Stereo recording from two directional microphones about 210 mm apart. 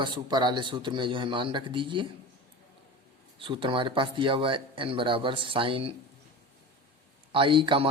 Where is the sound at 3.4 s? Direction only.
25° right (ahead or behind).